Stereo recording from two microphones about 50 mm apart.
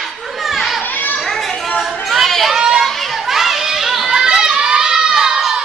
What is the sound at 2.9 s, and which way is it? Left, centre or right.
Children playing, centre.